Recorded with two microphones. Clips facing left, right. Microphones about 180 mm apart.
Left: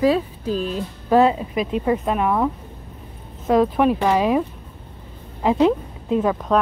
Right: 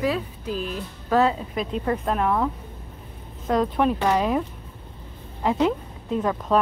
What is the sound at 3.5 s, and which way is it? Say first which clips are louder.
Speech: left 5 dB; 10° left (ahead or behind).